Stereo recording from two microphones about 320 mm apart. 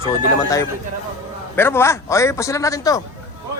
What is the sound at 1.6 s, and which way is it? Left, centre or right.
A man's voice, centre.